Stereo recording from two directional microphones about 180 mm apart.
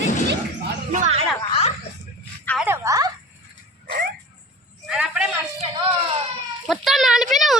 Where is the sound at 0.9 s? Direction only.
40° right (ahead or behind).